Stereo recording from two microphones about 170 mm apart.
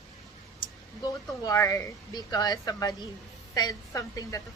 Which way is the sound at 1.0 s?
20° left (ahead or behind).